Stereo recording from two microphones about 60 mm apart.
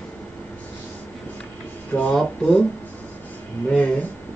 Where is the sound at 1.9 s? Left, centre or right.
Centre.